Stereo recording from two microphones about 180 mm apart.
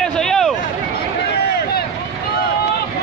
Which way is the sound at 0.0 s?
5° left (ahead or behind).